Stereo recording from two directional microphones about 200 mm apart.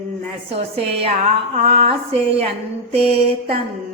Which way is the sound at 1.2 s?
35° right (ahead or behind).